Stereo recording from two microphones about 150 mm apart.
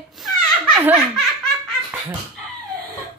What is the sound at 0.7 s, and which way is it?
Laughter, 15° right (ahead or behind).